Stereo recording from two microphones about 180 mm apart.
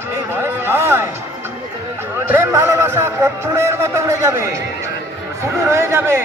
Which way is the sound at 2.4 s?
15° right (ahead or behind).